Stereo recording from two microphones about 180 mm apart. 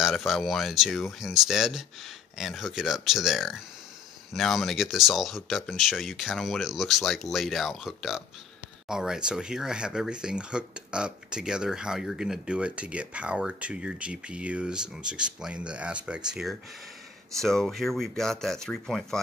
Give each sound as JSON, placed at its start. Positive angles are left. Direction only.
{"t": 0.0, "sound": "speech", "side_deg": 0}